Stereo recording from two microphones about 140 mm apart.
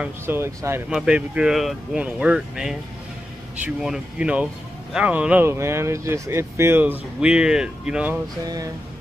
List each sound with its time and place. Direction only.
0.0 s speech: 15° right (ahead or behind)
0.8 s speech: 5° right (ahead or behind)